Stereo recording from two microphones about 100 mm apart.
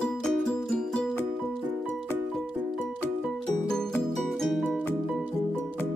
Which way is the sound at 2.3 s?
5° left (ahead or behind).